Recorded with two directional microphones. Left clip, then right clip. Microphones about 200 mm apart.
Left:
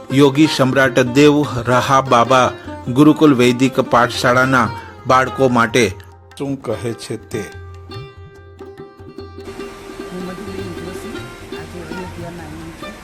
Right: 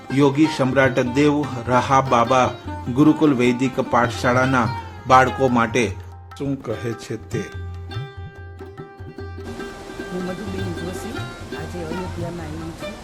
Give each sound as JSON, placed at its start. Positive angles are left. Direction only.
{"t": 0.1, "sound": "speech", "side_deg": 20}
{"t": 6.4, "sound": "speech", "side_deg": 5}